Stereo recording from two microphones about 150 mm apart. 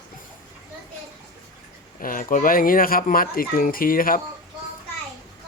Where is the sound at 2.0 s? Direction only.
65° left (ahead or behind).